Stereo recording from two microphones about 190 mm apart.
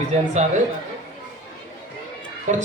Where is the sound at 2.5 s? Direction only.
35° right (ahead or behind).